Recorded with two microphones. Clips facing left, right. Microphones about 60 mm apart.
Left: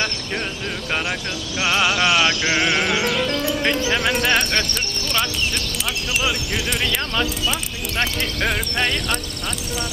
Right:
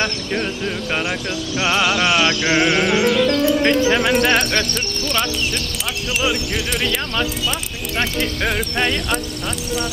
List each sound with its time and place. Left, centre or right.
1.6 s speech: centre
1.9 s music: centre
2.4 s music: centre
2.7 s speech: centre
3.3 s music: centre
3.5 s music: centre
8.0 s speech: centre